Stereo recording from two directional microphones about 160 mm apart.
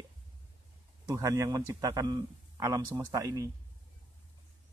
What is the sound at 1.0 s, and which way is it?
Speech, 20° right (ahead or behind).